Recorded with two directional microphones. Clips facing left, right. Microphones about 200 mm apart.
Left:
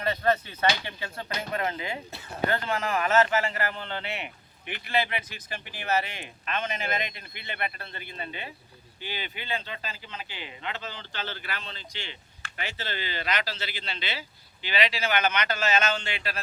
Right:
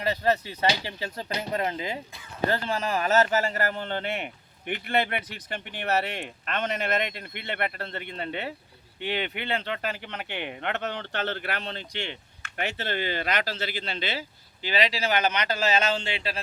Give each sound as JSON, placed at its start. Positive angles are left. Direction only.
{"t": 0.2, "sound": "speech", "side_deg": -30}